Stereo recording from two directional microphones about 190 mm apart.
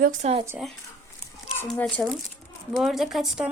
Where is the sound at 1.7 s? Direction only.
5° left (ahead or behind).